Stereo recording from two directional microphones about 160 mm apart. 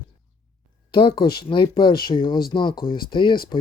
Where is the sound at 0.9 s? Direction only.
30° left (ahead or behind).